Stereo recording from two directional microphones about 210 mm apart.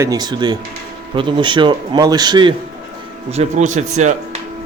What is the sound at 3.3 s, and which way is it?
Speech, 30° right (ahead or behind).